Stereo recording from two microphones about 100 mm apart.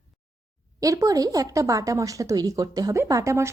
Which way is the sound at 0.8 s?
35° right (ahead or behind).